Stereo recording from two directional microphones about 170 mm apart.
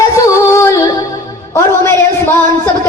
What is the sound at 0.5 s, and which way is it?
Music, 15° left (ahead or behind).